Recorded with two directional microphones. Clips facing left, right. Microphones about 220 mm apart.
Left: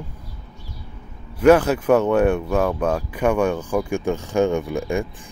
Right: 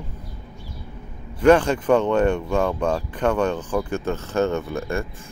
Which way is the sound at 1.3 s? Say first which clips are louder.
Left 2 dB; 10° left (ahead or behind).